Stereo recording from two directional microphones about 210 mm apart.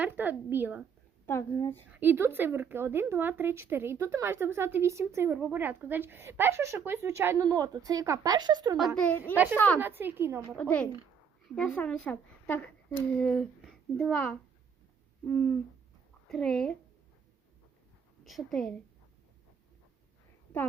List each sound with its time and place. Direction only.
0.0 s speech: 10° right (ahead or behind)
1.3 s speech: 15° left (ahead or behind)
1.9 s speech: 10° right (ahead or behind)
9.0 s speech: 5° left (ahead or behind)
9.7 s speech: 10° right (ahead or behind)
10.5 s a woman's voice: 5° left (ahead or behind)
18.3 s a woman's voice: centre (ahead or behind)